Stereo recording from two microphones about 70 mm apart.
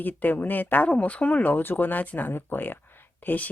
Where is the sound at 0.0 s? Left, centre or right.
Left.